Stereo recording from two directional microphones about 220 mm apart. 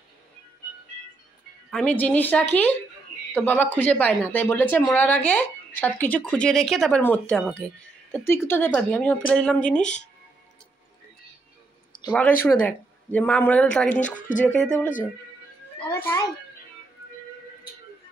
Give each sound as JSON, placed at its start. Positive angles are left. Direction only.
{"t": 1.7, "sound": "a woman's voice", "side_deg": 5}
{"t": 12.1, "sound": "speech", "side_deg": 5}
{"t": 13.9, "sound": "speech", "side_deg": 35}
{"t": 14.4, "sound": "speech", "side_deg": 10}